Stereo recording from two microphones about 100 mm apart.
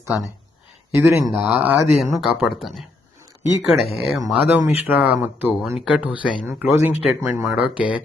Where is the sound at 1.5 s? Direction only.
15° right (ahead or behind).